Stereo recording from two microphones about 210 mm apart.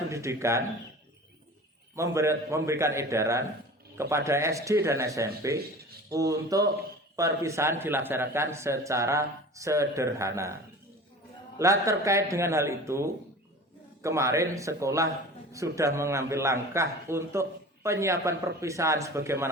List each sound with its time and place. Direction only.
0.1 s a man's voice: 15° right (ahead or behind)
2.0 s a man's voice: 15° right (ahead or behind)
11.5 s a man's voice: 15° right (ahead or behind)